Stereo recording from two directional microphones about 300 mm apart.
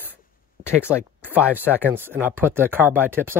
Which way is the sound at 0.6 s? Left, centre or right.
Right.